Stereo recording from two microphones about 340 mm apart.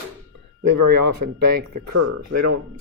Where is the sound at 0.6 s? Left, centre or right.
Right.